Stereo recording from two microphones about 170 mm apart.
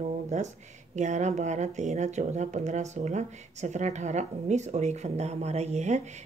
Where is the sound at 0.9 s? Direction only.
45° right (ahead or behind).